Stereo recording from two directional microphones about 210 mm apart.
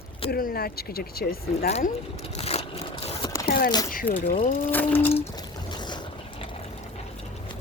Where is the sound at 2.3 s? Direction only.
30° left (ahead or behind).